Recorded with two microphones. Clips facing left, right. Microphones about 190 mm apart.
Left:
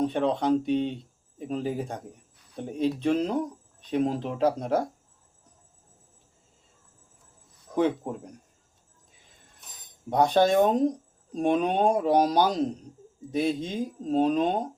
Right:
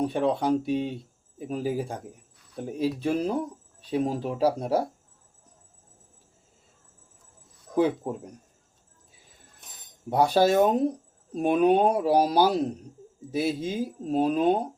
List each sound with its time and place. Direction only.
0.0 s speech: 10° right (ahead or behind)
7.8 s speech: 10° right (ahead or behind)
10.1 s speech: 5° right (ahead or behind)